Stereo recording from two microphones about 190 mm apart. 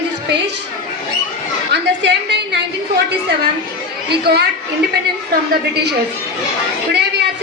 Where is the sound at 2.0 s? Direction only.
65° right (ahead or behind).